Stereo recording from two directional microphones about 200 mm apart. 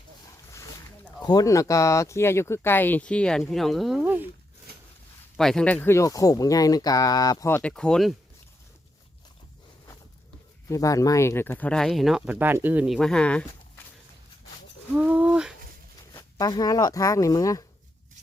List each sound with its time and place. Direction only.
0.5 s speech: 15° left (ahead or behind); by 4.3 s 10° right (ahead or behind)
5.4 s speech: 5° left (ahead or behind)
10.7 s speech: 15° left (ahead or behind)
14.9 s a sound: 5° right (ahead or behind)
16.1 s speech: 20° left (ahead or behind)